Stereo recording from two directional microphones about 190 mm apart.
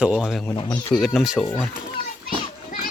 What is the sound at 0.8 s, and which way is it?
Speech, 20° left (ahead or behind).